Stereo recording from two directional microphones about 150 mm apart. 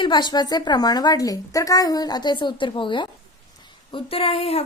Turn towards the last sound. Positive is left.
turn(degrees=40)  # may be behind; listen again after turning